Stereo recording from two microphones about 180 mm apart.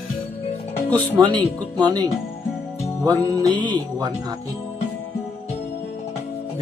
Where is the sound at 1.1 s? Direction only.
25° right (ahead or behind).